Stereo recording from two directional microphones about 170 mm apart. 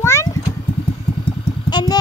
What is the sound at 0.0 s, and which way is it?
Cat, 15° left (ahead or behind).